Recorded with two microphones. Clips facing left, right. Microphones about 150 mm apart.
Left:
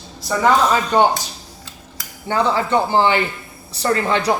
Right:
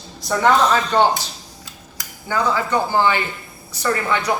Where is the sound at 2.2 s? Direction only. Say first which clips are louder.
Left 2 dB; 30° left (ahead or behind).